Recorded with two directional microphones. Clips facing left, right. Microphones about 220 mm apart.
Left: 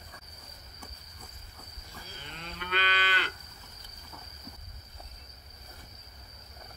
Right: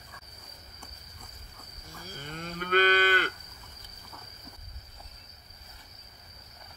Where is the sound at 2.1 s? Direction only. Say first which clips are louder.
Right 7 dB; 45° right (ahead or behind).